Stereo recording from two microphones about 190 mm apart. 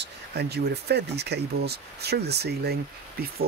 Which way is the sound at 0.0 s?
60° right (ahead or behind).